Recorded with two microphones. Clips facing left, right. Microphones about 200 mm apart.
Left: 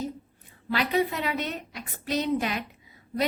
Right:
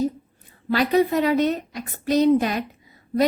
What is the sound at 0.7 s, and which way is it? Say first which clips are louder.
A woman's voice: right 7 dB; 40° right (ahead or behind).